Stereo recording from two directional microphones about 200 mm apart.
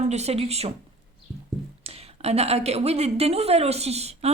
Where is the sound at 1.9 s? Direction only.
30° right (ahead or behind).